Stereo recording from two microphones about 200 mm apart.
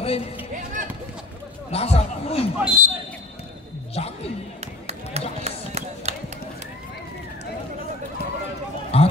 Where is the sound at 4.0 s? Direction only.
30° left (ahead or behind).